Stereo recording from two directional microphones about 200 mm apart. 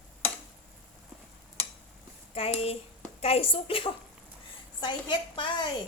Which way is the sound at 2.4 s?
30° left (ahead or behind).